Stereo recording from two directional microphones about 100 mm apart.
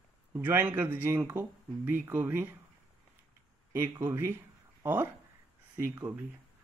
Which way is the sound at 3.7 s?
25° right (ahead or behind).